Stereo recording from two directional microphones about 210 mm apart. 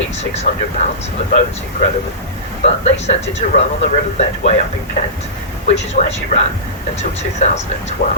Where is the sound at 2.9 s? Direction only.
30° left (ahead or behind).